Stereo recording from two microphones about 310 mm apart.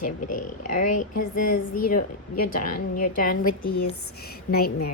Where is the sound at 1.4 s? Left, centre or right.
Left.